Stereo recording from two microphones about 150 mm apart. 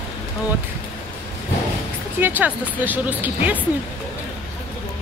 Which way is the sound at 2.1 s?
10° right (ahead or behind).